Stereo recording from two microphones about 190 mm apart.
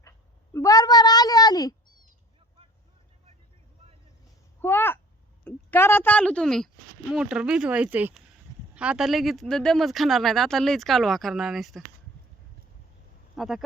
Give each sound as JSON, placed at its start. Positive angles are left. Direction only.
{"t": 0.5, "sound": "meow", "side_deg": 15}
{"t": 4.6, "sound": "a sound", "side_deg": 10}
{"t": 5.5, "sound": "a woman's voice", "side_deg": 10}
{"t": 13.3, "sound": "speech", "side_deg": 0}